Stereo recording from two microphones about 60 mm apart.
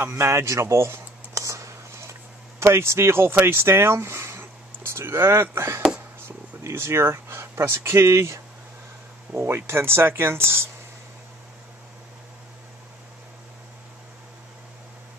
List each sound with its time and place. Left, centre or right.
0.0 s speech: right
1.4 s whispering: right
2.6 s speech: right